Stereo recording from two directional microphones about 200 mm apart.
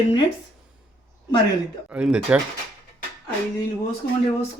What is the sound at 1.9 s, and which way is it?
Speech, 5° right (ahead or behind).